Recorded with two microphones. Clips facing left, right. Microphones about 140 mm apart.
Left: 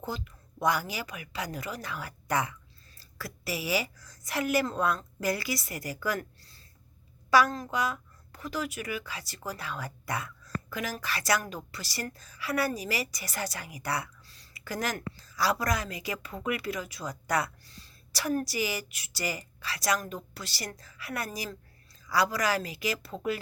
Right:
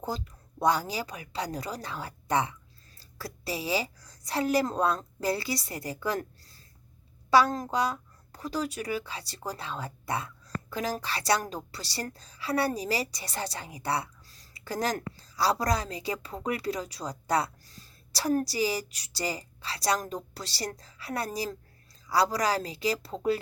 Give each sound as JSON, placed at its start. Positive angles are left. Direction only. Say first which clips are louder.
{"t": 0.6, "sound": "a woman's voice", "louder": "right 2 dB", "side_deg": -30}